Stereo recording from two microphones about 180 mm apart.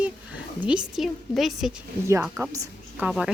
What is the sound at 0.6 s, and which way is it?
A woman's voice, 5° right (ahead or behind).